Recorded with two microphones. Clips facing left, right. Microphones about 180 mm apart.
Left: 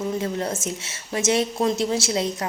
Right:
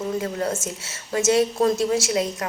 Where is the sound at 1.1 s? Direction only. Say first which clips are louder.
Right 3 dB; 20° left (ahead or behind).